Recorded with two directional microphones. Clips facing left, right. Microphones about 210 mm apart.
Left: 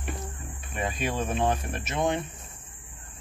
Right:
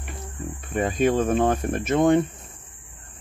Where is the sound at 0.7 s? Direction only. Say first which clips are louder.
Right 9 dB; 50° right (ahead or behind).